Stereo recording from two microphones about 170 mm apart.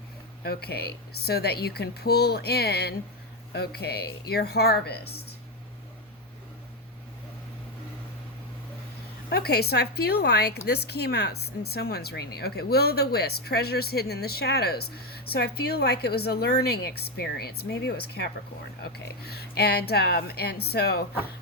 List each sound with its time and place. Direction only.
0.4 s speech: 70° left (ahead or behind)
9.3 s speech: 70° left (ahead or behind)